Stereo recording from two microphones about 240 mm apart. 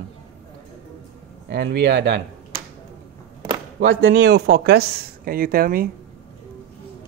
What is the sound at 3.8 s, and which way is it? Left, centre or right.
Speech, right.